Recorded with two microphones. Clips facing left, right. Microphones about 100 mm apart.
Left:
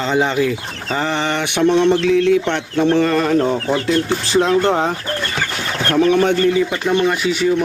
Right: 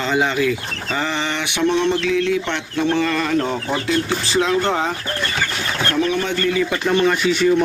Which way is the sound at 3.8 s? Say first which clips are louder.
Left 3 dB; 50° left (ahead or behind).